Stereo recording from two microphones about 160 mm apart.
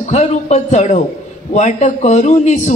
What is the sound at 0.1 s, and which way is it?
A man's voice, 45° left (ahead or behind).